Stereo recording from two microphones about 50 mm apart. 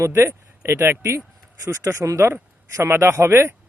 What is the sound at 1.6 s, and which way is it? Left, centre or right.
Speech, right.